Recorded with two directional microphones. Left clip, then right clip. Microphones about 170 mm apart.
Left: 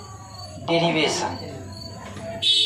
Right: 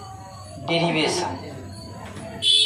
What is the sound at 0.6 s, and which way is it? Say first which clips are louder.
Speech: left 1 dB; 20° left (ahead or behind).